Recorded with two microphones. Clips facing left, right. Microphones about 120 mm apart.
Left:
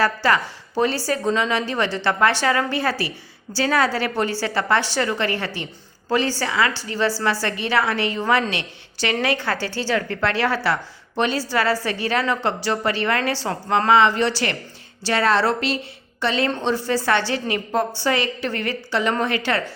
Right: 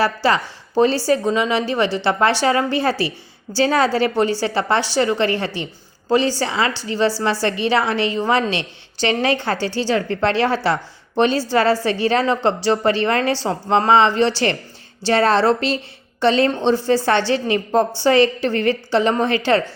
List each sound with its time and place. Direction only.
0.0 s a woman's voice: 15° right (ahead or behind)